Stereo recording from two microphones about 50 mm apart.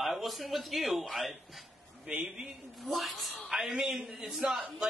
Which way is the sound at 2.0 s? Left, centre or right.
Centre.